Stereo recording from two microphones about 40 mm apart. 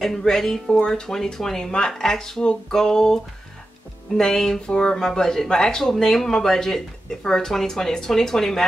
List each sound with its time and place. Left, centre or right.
0.0 s speech: centre
0.7 s speech: left